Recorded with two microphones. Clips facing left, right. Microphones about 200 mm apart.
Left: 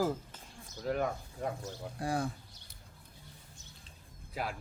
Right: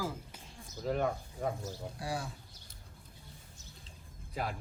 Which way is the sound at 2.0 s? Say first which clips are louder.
Left 5 dB; 50° left (ahead or behind).